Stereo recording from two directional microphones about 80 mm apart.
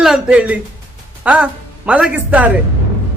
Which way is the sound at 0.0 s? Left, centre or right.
Centre.